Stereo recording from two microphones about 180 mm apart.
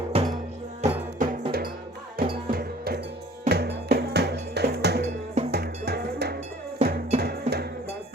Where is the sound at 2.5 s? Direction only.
60° right (ahead or behind).